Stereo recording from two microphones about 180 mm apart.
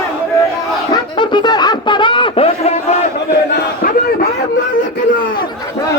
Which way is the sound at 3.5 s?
50° left (ahead or behind).